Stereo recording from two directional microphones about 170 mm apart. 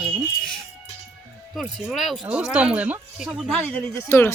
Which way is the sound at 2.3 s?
5° right (ahead or behind).